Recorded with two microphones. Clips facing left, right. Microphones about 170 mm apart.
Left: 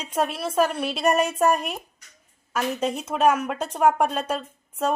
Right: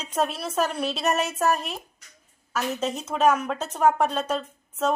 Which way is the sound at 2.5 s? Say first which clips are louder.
Left 2 dB; 10° left (ahead or behind).